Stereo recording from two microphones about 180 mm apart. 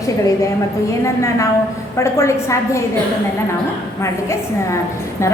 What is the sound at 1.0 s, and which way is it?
A woman's voice, 15° left (ahead or behind).